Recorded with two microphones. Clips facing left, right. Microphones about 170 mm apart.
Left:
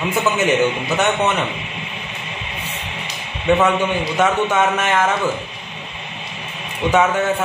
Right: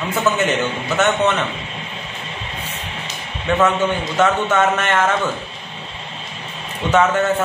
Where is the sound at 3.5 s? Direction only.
15° left (ahead or behind).